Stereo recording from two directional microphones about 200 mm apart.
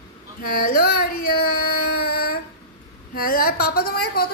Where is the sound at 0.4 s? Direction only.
45° left (ahead or behind).